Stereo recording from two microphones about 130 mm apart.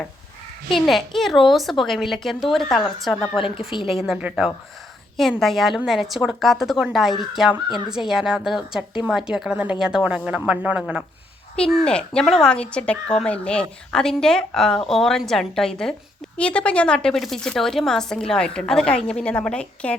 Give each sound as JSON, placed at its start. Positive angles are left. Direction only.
{"t": 0.7, "sound": "speech", "side_deg": 0}
{"t": 3.4, "sound": "a woman's voice", "side_deg": 45}
{"t": 4.0, "sound": "speech", "side_deg": -5}
{"t": 11.5, "sound": "speech", "side_deg": 5}